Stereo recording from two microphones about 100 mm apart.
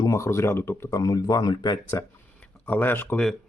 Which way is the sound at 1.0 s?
35° left (ahead or behind).